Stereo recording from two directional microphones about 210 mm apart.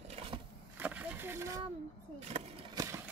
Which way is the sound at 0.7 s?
5° right (ahead or behind).